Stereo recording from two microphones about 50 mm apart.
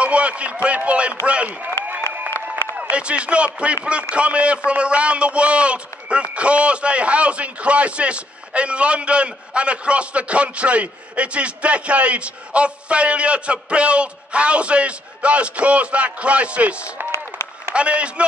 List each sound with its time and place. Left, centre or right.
0.0 s a man's voice: right
2.7 s a man's voice: right